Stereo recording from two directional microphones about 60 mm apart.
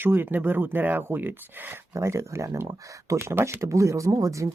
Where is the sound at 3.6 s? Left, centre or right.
Right.